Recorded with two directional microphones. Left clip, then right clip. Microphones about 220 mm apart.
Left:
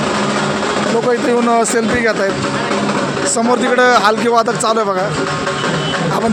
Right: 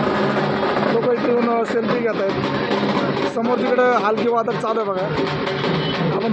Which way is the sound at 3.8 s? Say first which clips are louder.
Left 7 dB; 20° left (ahead or behind).